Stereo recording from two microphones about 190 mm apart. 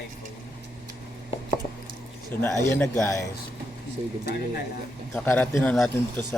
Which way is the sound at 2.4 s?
10° left (ahead or behind).